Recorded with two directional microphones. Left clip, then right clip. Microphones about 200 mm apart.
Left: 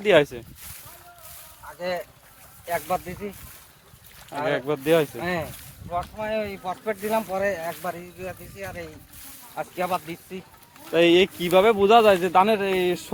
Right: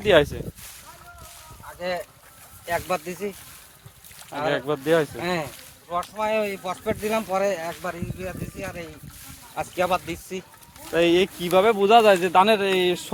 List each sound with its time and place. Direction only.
0.0 s speech: centre (ahead or behind)
1.6 s a sound: 5° right (ahead or behind)
2.6 s speech: 25° right (ahead or behind)
3.2 s speech: 55° right (ahead or behind)
4.4 s speech: centre (ahead or behind)
5.2 s speech: 25° right (ahead or behind)
5.9 s speech: 45° right (ahead or behind); by 8.9 s 10° right (ahead or behind)
9.6 s speech: 45° right (ahead or behind)
10.9 s speech: 15° left (ahead or behind); by 13.0 s 10° right (ahead or behind)